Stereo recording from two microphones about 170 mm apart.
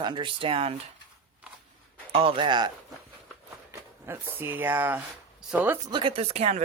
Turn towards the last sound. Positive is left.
turn(degrees=-40)  # may be behind; listen again after turning